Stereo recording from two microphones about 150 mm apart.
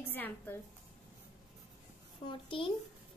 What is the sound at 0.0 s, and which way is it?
Speech, 15° left (ahead or behind).